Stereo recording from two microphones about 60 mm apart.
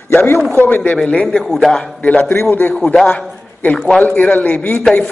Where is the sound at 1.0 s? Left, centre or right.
Centre.